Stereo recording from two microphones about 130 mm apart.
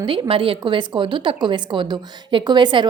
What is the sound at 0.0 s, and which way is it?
A woman's voice, 45° right (ahead or behind).